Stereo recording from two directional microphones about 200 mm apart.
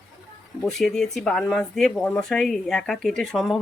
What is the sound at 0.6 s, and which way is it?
Speech, centre (ahead or behind).